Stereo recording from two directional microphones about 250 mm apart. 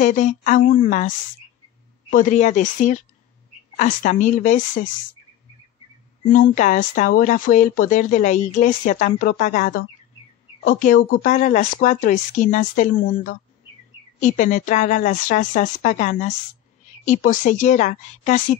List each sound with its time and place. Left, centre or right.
0.0 s speech: left
6.3 s speech: left